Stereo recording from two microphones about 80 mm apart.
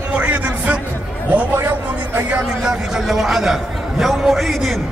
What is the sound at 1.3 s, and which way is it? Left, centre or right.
Speech, right.